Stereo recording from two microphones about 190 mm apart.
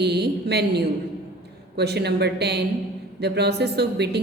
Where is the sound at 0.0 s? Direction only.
60° right (ahead or behind).